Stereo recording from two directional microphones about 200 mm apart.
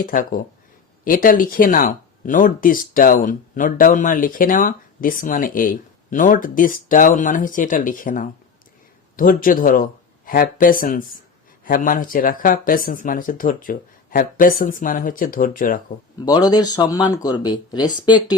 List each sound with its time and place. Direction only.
0.0 s speech: 45° left (ahead or behind)
16.2 s speech: 20° left (ahead or behind)